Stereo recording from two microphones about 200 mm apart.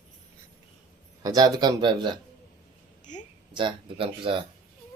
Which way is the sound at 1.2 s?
20° right (ahead or behind).